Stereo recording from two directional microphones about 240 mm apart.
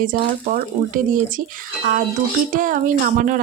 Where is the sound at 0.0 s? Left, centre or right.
Right.